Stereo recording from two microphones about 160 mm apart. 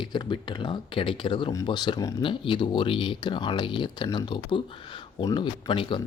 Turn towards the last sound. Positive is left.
turn(degrees=30)  # may be behind; listen again after turning